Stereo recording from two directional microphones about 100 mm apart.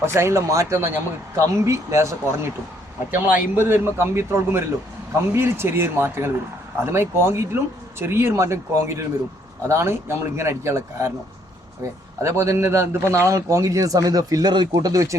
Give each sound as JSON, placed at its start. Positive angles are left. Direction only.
{"t": 0.0, "sound": "speech", "side_deg": -25}
{"t": 3.1, "sound": "speech", "side_deg": -20}
{"t": 12.2, "sound": "a man's voice", "side_deg": -30}